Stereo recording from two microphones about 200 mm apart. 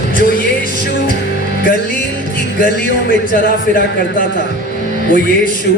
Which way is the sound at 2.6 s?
45° left (ahead or behind).